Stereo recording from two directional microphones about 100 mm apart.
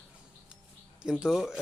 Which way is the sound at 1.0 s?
5° right (ahead or behind).